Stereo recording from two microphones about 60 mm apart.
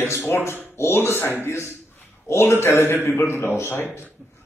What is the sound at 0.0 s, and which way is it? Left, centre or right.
A man's voice, left.